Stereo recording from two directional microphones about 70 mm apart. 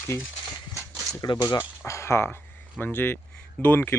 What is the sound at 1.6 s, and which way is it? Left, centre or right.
Speech, left.